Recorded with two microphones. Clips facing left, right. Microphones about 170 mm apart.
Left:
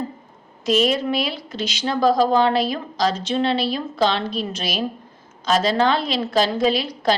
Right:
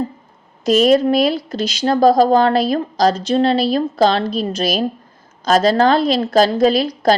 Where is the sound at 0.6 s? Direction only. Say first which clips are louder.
Right 7 dB; 40° right (ahead or behind).